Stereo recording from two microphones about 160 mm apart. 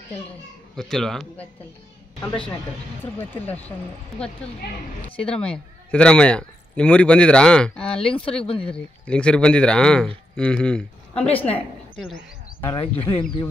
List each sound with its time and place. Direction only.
0.7 s speech: 5° left (ahead or behind)
4.4 s a man's voice: 5° left (ahead or behind)
8.0 s speech: 35° left (ahead or behind)
8.6 s a man's voice: 5° left (ahead or behind)
12.6 s speech: 30° left (ahead or behind)